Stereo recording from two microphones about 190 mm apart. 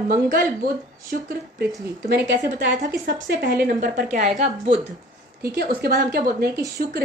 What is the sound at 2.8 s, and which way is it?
A woman's voice, 45° right (ahead or behind).